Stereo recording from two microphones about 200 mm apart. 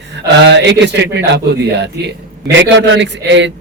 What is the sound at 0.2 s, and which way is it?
A man's voice, 60° right (ahead or behind).